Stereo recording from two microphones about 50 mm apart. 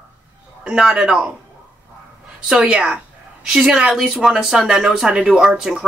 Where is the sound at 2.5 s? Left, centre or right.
Centre.